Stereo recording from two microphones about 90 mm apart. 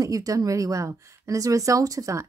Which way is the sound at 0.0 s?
40° right (ahead or behind).